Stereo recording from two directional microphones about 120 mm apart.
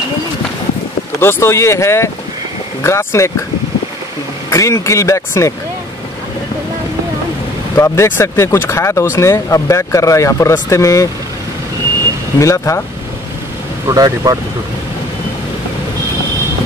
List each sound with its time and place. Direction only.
1.2 s speech: 20° left (ahead or behind)
4.5 s speech: 25° left (ahead or behind)
7.7 s speech: 25° left (ahead or behind)
12.4 s speech: 25° left (ahead or behind)
13.8 s speech: 30° right (ahead or behind)